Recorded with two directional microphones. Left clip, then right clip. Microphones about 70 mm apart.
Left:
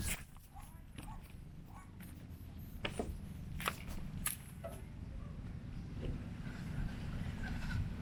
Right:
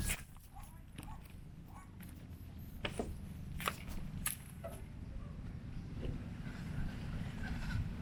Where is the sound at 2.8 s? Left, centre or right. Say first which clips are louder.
Even; right.